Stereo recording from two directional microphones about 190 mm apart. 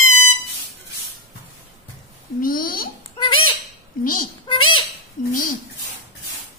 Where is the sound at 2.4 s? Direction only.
50° left (ahead or behind).